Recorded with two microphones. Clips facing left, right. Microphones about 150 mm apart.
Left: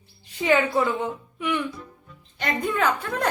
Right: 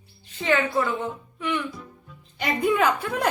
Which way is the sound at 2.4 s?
10° right (ahead or behind).